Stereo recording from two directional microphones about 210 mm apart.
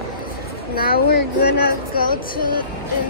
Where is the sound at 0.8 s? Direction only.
45° left (ahead or behind).